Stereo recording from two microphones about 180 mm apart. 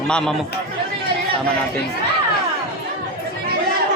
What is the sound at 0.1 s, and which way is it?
Speech, 5° left (ahead or behind).